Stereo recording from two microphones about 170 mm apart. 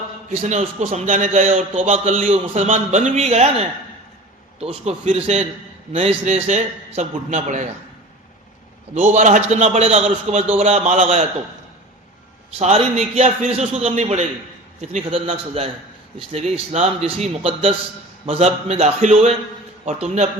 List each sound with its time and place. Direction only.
0.4 s a man's voice: 40° right (ahead or behind)
9.0 s a man's voice: 45° right (ahead or behind)
12.5 s a man's voice: 35° right (ahead or behind)